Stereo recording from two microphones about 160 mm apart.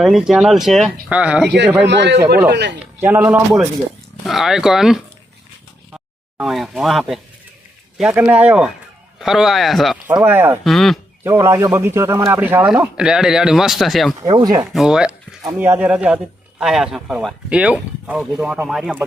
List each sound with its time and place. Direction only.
0.0 s a man's voice: centre (ahead or behind)
1.9 s speech: 90° right
3.0 s a man's voice: 10° right (ahead or behind)
4.3 s a man's voice: centre (ahead or behind)
10.1 s a man's voice: 10° right (ahead or behind)
10.6 s speech: centre (ahead or behind)
11.2 s a man's voice: 15° right (ahead or behind); by 14.2 s centre (ahead or behind)
14.3 s speech: 25° right (ahead or behind)
14.7 s a man's voice: 5° right (ahead or behind)